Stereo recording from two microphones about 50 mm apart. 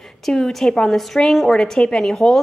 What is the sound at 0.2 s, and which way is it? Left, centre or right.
A woman's voice, centre.